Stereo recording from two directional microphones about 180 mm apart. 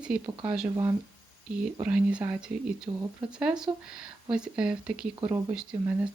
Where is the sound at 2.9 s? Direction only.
25° right (ahead or behind).